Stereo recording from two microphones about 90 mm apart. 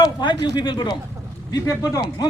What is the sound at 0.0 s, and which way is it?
Speech, 55° left (ahead or behind).